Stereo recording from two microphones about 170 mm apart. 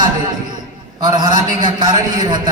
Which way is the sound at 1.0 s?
25° right (ahead or behind).